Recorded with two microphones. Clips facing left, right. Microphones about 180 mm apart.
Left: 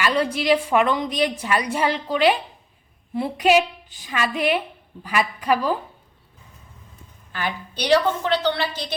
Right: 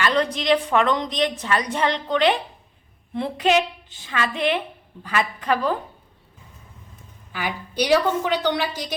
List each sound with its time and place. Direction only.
0.0 s a sound: 10° left (ahead or behind)
0.3 s a woman's voice: 10° left (ahead or behind)
7.3 s a woman's voice: 10° right (ahead or behind)